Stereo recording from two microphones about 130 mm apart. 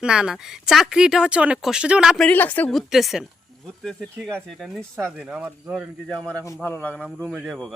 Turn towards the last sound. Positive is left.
turn(degrees=0)  # may be behind; listen again after turning